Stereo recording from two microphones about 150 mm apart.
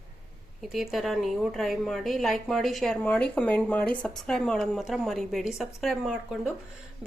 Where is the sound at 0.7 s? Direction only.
Centre (ahead or behind).